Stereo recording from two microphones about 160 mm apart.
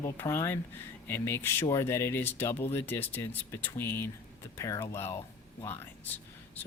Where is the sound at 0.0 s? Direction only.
15° left (ahead or behind).